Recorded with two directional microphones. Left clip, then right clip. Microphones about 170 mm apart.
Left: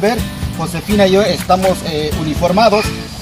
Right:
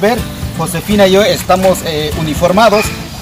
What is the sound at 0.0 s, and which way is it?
Speech, 5° right (ahead or behind).